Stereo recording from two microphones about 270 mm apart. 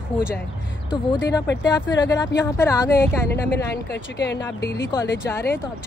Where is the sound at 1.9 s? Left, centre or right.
Centre.